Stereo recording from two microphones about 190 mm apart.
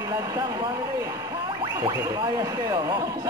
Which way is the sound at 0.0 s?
20° right (ahead or behind).